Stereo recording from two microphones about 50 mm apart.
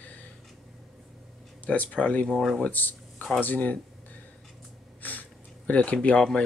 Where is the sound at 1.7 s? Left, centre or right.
Left.